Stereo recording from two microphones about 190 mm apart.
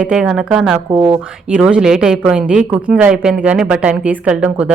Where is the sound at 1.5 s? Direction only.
5° right (ahead or behind).